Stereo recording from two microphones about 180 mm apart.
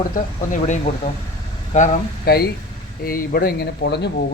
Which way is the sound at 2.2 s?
60° left (ahead or behind).